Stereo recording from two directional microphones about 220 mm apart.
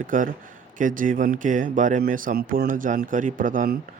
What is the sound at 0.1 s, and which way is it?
Speech, 35° right (ahead or behind).